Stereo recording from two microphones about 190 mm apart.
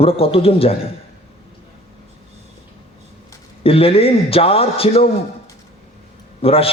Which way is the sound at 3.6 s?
30° left (ahead or behind).